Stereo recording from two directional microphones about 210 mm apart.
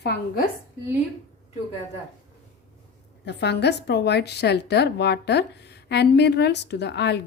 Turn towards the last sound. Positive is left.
turn(degrees=55)  # may be behind; listen again after turning